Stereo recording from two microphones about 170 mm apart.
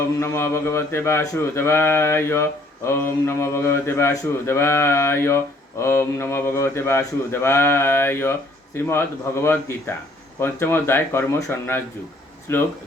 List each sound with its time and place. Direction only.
0.2 s a man's voice: 15° left (ahead or behind)